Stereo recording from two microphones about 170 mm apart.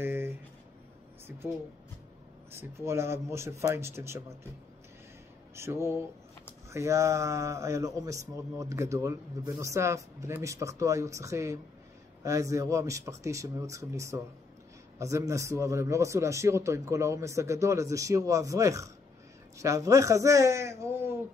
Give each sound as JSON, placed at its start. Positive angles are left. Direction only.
{"t": 0.0, "sound": "a sound", "side_deg": -10}
{"t": 2.5, "sound": "speech", "side_deg": -15}
{"t": 5.6, "sound": "speech", "side_deg": -15}